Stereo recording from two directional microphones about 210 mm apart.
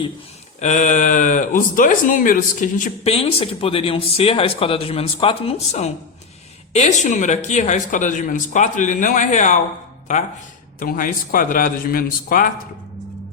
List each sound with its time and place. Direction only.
0.6 s speech: 35° left (ahead or behind)
10.8 s speech: 40° left (ahead or behind)